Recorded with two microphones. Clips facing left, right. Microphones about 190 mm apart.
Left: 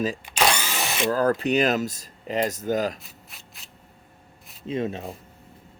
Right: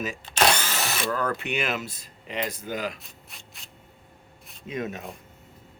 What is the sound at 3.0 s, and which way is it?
Rub, centre (ahead or behind).